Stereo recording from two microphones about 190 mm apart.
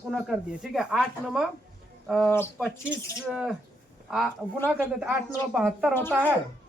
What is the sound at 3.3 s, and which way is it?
Speech, centre (ahead or behind).